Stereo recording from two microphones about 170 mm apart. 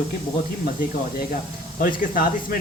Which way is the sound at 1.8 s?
55° left (ahead or behind).